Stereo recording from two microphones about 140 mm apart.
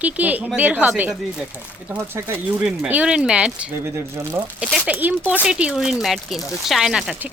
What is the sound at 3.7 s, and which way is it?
Speech, 20° right (ahead or behind).